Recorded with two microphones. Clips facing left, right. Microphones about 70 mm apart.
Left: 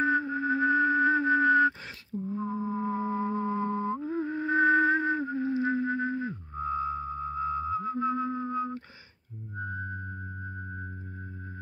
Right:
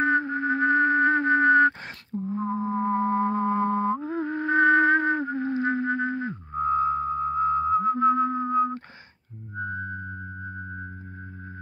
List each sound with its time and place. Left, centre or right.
0.0 s music: right